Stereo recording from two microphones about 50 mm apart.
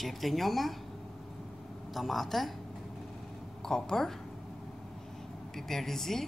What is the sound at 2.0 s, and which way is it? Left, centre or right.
Speech, centre.